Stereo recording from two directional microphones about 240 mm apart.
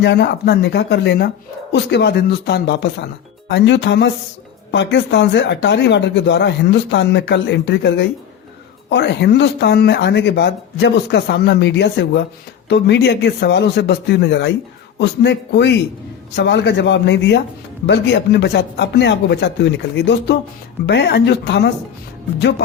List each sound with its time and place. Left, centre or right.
0.0 s speech: left